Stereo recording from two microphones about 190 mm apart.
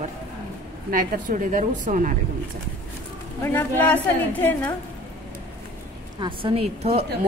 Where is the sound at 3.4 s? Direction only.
10° left (ahead or behind).